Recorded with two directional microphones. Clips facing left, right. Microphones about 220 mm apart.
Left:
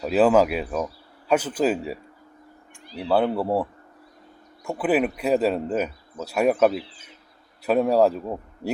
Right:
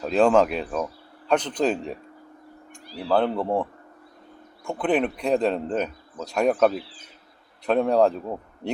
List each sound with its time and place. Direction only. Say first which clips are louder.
0.0 s speech: left 1 dB; 5° left (ahead or behind)
2.8 s speech: left 1 dB; 20° left (ahead or behind)
3.2 s speech: left 1 dB; 5° left (ahead or behind)